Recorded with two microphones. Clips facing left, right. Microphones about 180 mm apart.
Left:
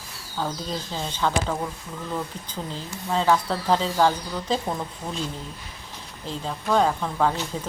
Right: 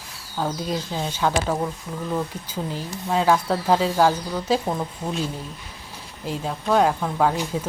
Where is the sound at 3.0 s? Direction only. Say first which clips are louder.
Right 2 dB; 10° right (ahead or behind).